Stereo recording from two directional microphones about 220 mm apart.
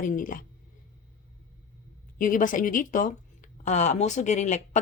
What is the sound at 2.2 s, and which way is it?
A woman's voice, 35° left (ahead or behind).